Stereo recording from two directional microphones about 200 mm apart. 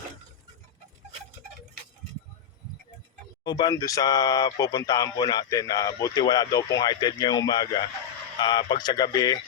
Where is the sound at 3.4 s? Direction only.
20° left (ahead or behind).